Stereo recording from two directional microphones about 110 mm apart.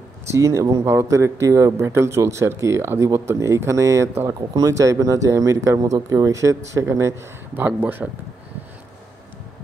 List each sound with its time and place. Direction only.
0.3 s a man's voice: 25° right (ahead or behind)